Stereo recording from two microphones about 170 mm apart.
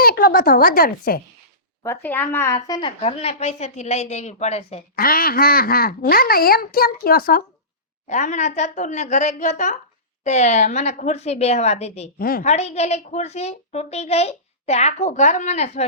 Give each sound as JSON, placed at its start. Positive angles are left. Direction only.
{"t": 0.0, "sound": "speech", "side_deg": 60}
{"t": 1.8, "sound": "speech", "side_deg": 15}
{"t": 2.6, "sound": "speech", "side_deg": 20}
{"t": 3.0, "sound": "a woman's voice", "side_deg": 35}
{"t": 4.9, "sound": "speech", "side_deg": 60}
{"t": 8.0, "sound": "a woman's voice", "side_deg": 45}
{"t": 12.2, "sound": "speech", "side_deg": 60}
{"t": 12.5, "sound": "a woman's voice", "side_deg": 40}